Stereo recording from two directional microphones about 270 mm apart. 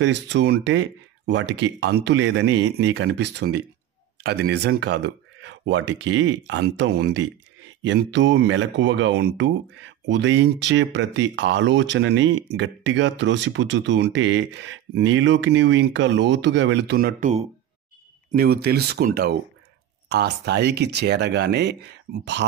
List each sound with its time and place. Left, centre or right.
0.0 s speech: right